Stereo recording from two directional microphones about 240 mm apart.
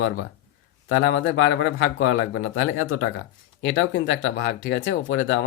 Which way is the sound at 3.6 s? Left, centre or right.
Left.